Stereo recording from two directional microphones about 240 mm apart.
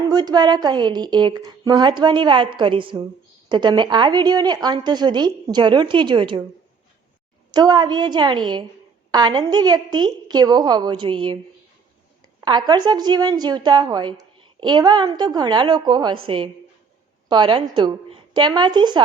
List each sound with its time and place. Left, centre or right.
0.1 s a woman's voice: centre
7.5 s a woman's voice: centre
12.4 s a woman's voice: centre